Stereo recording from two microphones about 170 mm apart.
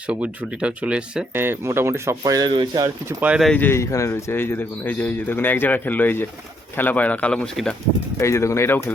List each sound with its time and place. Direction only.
0.1 s speech: 5° right (ahead or behind); by 3.2 s 25° right (ahead or behind)
3.2 s speech: 5° right (ahead or behind)
3.5 s speech: 10° left (ahead or behind)
8.2 s speech: 15° left (ahead or behind)